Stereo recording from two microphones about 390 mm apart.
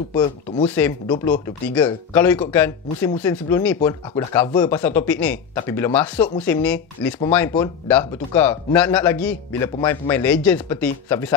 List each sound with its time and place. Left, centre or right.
0.1 s speech: centre